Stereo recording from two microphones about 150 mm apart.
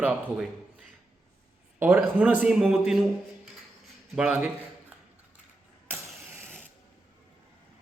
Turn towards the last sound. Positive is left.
turn(degrees=-15)  # may be behind; listen again after turning